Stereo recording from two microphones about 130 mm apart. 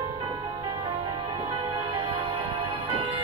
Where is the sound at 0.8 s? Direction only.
35° right (ahead or behind).